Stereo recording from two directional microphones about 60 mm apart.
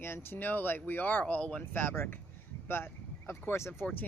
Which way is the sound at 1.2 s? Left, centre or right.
Centre.